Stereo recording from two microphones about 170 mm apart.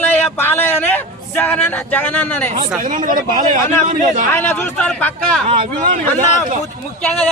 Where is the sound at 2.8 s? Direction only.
50° right (ahead or behind).